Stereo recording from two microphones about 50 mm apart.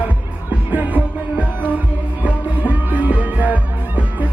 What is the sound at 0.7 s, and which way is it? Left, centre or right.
Music, right.